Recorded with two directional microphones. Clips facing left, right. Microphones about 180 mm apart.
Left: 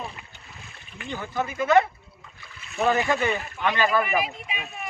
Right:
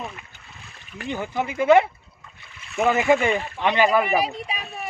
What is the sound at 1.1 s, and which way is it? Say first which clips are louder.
Speech: right 2 dB; 15° right (ahead or behind).